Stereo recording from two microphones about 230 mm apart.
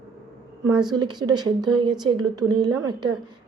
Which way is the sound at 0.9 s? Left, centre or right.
Centre.